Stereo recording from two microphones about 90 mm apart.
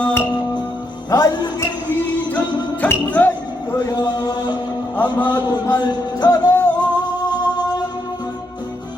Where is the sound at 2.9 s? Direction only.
20° left (ahead or behind).